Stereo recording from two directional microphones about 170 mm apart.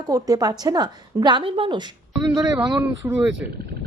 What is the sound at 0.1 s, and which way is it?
A woman's voice, 20° right (ahead or behind).